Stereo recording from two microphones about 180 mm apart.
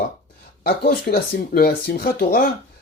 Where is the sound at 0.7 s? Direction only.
55° left (ahead or behind).